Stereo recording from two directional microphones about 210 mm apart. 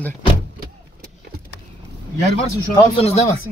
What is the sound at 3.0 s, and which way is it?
Speech, 30° left (ahead or behind).